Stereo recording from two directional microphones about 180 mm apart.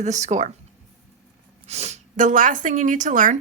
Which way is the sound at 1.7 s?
35° right (ahead or behind).